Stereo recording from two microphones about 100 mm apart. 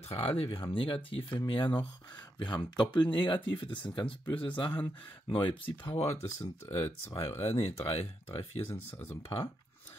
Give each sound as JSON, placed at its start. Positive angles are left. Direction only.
{"t": 0.1, "sound": "speech", "side_deg": 65}
{"t": 7.1, "sound": "speech", "side_deg": 60}
{"t": 8.6, "sound": "speech", "side_deg": 20}